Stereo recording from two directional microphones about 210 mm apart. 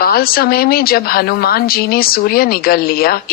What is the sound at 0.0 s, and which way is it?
Speech, 45° left (ahead or behind).